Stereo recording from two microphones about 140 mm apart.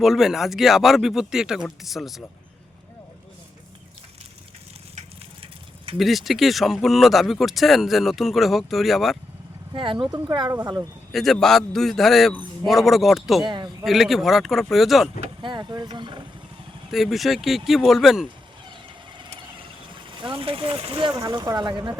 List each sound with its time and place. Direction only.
0.0 s speech: 5° right (ahead or behind)
5.4 s a sound: 40° right (ahead or behind)
6.0 s speech: centre (ahead or behind)
9.7 s speech: 35° right (ahead or behind)
10.5 s speech: 20° right (ahead or behind)
11.1 s speech: centre (ahead or behind)
13.4 s speech: 35° right (ahead or behind)
13.8 s speech: centre (ahead or behind)
15.4 s speech: 30° right (ahead or behind)
16.9 s speech: centre (ahead or behind)
20.2 s speech: 40° right (ahead or behind)
21.1 s speech: 25° right (ahead or behind)